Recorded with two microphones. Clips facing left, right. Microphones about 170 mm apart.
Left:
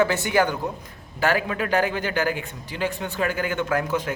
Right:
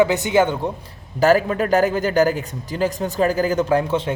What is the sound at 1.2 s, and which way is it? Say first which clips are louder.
A man's voice: right 7 dB; 40° right (ahead or behind).